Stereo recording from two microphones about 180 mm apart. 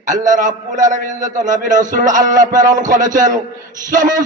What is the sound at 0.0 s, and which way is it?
A man's voice, 45° right (ahead or behind).